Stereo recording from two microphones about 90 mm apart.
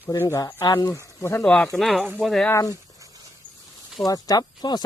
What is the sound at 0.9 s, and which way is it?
Speech, 30° left (ahead or behind).